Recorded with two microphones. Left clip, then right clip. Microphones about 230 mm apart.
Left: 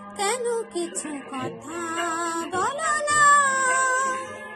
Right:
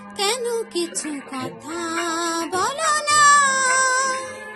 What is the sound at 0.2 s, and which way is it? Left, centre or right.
Speech, right.